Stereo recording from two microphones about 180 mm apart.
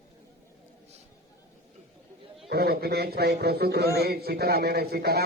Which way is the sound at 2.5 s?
60° right (ahead or behind).